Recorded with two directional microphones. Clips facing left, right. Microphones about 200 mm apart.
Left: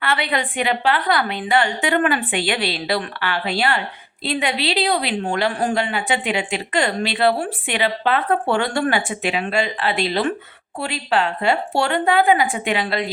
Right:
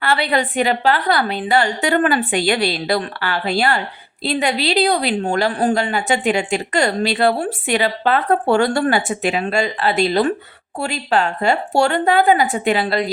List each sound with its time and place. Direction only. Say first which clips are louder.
0.0 s a woman's voice: right 4 dB; 35° right (ahead or behind)